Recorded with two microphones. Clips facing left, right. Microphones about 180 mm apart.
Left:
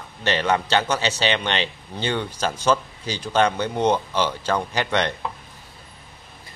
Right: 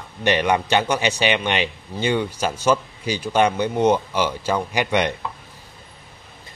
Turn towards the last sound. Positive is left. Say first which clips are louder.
# right 2 dB
turn(degrees=-10)  # may be behind; listen again after turning